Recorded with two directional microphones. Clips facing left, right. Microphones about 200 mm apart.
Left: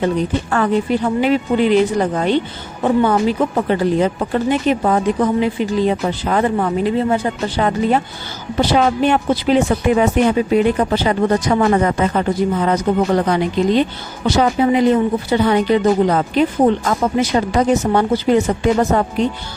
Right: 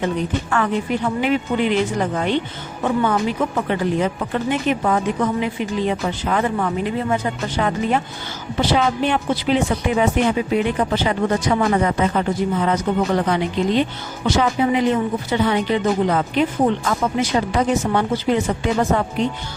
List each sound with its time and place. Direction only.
0.5 s a woman's voice: 35° left (ahead or behind)